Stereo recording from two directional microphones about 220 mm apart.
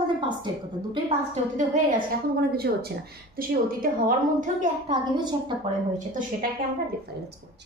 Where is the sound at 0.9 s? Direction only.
30° right (ahead or behind).